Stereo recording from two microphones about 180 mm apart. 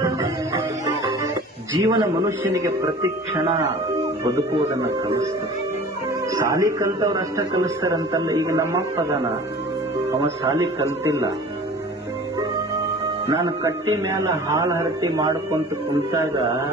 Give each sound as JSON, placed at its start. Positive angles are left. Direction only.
{"t": 0.0, "sound": "music", "side_deg": -15}
{"t": 1.8, "sound": "a man's voice", "side_deg": -20}
{"t": 6.3, "sound": "a man's voice", "side_deg": -20}
{"t": 10.2, "sound": "a man's voice", "side_deg": -20}
{"t": 13.3, "sound": "a man's voice", "side_deg": -25}
{"t": 14.0, "sound": "a man's voice", "side_deg": -15}